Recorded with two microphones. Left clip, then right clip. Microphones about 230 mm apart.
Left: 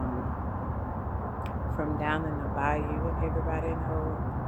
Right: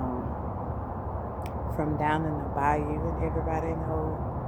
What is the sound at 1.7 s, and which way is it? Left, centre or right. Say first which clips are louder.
Speech: right 3 dB; right.